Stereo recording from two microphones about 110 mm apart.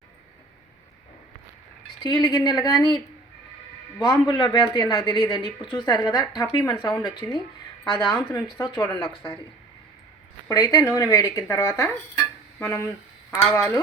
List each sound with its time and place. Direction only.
2.0 s speech: 40° left (ahead or behind)
4.0 s speech: 40° left (ahead or behind)
10.5 s speech: 35° left (ahead or behind)